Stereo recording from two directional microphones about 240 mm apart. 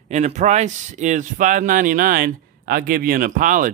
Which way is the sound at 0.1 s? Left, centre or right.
Right.